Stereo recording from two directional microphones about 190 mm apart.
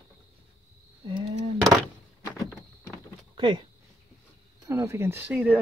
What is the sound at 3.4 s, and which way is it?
Speech, 25° right (ahead or behind).